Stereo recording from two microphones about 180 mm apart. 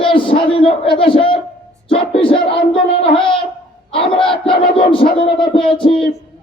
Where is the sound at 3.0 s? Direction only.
30° left (ahead or behind).